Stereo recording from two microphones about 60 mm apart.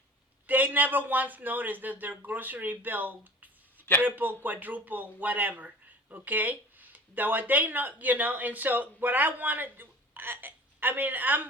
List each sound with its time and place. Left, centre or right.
0.4 s a man's voice: right